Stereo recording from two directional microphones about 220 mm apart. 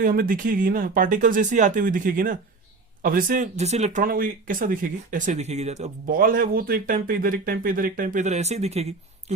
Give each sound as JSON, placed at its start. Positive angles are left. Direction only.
{"t": 0.0, "sound": "speech", "side_deg": -40}